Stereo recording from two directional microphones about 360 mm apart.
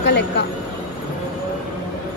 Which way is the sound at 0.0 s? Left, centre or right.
Left.